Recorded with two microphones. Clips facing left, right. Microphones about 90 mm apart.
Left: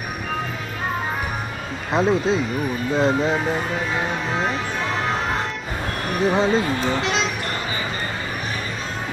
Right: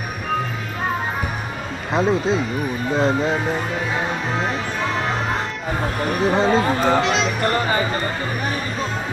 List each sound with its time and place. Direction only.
1.9 s speech: centre (ahead or behind)
6.2 s speech: centre (ahead or behind)
6.5 s speech: 45° right (ahead or behind)
7.0 s speech: centre (ahead or behind)
7.4 s music: 45° right (ahead or behind)